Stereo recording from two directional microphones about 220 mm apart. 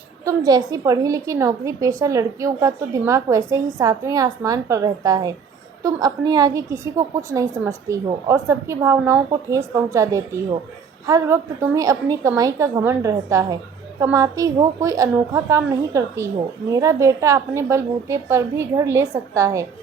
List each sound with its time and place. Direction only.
0.3 s a woman's voice: 15° right (ahead or behind)